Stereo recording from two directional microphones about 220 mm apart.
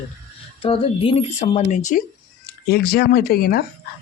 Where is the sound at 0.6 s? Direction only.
25° left (ahead or behind).